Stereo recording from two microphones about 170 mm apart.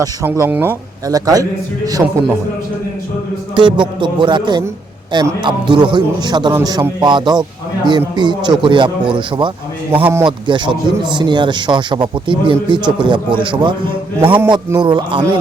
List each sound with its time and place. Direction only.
0.0 s a man's voice: 20° right (ahead or behind)
2.0 s a man's voice: 10° right (ahead or behind)
3.5 s speech: 25° right (ahead or behind)
10.0 s a man's voice: 15° right (ahead or behind)
10.2 s speech: 30° right (ahead or behind)
14.2 s a man's voice: 10° right (ahead or behind)
14.8 s speech: 25° right (ahead or behind)